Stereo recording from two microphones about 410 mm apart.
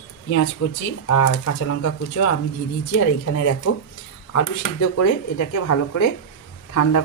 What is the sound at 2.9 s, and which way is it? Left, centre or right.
Speech, left.